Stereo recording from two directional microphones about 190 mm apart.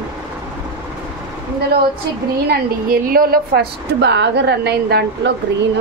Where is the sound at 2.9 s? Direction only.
50° right (ahead or behind).